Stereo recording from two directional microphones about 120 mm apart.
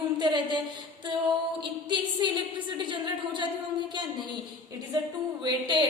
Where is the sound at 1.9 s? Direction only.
40° right (ahead or behind).